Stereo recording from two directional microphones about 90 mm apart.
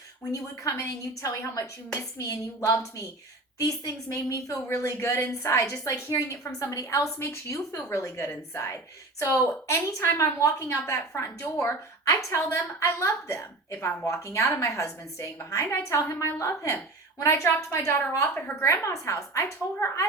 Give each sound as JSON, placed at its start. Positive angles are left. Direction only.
{"t": 0.3, "sound": "a woman's voice", "side_deg": 40}